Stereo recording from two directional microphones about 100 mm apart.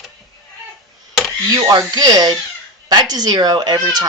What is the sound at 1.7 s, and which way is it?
Speech, 45° right (ahead or behind).